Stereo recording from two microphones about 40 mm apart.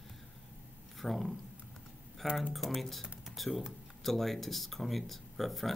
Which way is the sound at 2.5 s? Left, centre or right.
Centre.